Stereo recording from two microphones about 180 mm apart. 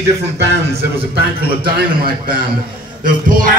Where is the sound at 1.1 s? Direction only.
60° right (ahead or behind).